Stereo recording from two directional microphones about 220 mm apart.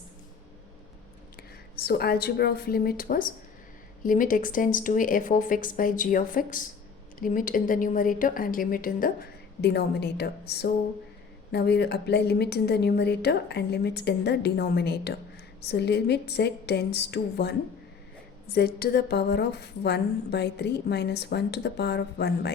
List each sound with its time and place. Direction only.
1.4 s a woman's voice: 45° left (ahead or behind)